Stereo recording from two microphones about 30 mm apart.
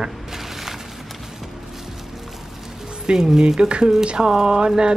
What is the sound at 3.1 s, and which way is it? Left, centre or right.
Speech, centre.